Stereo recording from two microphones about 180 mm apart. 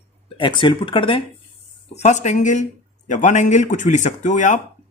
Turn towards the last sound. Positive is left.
turn(degrees=40)  # may be behind; listen again after turning